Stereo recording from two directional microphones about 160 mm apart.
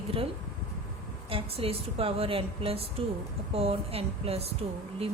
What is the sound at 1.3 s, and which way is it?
Speech, 35° right (ahead or behind).